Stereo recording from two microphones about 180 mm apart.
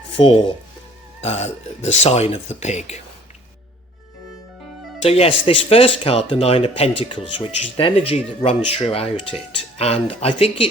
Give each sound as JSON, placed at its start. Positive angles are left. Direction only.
{"t": 0.2, "sound": "speech", "side_deg": 25}
{"t": 5.0, "sound": "speech", "side_deg": 35}